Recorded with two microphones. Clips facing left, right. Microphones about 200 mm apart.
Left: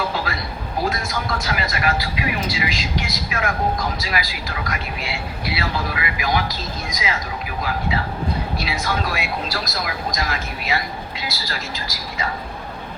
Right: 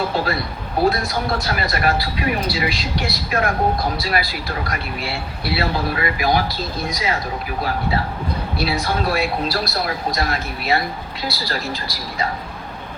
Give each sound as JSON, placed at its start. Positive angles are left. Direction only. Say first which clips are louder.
{"t": 0.9, "sound": "speech", "louder": "right 6 dB", "side_deg": -35}
{"t": 8.5, "sound": "speech", "louder": "right 3 dB", "side_deg": -35}